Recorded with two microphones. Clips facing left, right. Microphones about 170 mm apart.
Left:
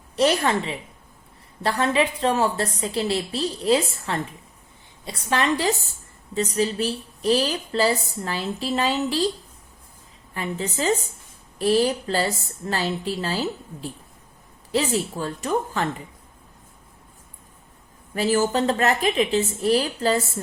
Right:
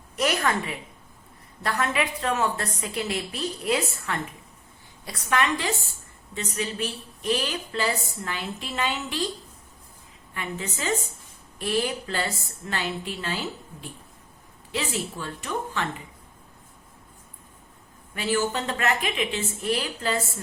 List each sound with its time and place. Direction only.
0.2 s a woman's voice: 30° left (ahead or behind)
10.3 s a woman's voice: 35° left (ahead or behind)
18.1 s a woman's voice: 40° left (ahead or behind)